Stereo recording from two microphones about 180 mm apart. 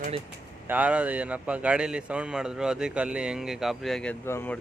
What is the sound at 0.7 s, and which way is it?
Speech, 10° right (ahead or behind).